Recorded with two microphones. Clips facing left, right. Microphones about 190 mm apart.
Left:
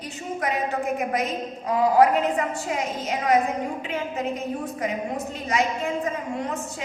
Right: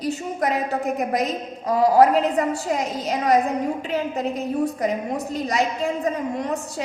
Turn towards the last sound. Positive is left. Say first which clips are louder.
# right 4 dB
turn(degrees=-35)  # may be behind; listen again after turning